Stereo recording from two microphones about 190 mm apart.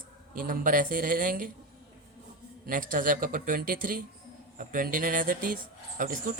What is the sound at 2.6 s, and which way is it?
Speech, 45° right (ahead or behind).